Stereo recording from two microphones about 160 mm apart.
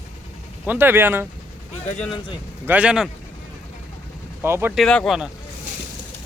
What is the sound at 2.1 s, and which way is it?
Speech, 30° left (ahead or behind).